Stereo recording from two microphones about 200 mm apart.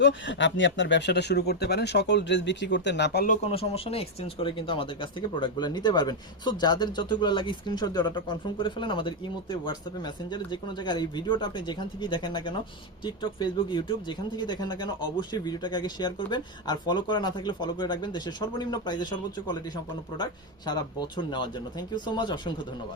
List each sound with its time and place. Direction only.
0.0 s speech: 65° left (ahead or behind)
3.4 s speech: 30° left (ahead or behind)